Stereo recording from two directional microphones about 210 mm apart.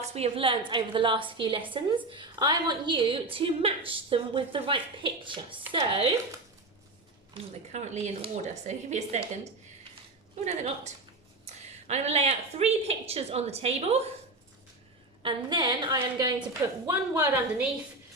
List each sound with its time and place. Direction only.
0.0 s a woman's voice: 30° right (ahead or behind)
7.3 s speech: 30° right (ahead or behind)
10.4 s a woman's voice: 30° right (ahead or behind)
15.2 s a woman's voice: 20° right (ahead or behind)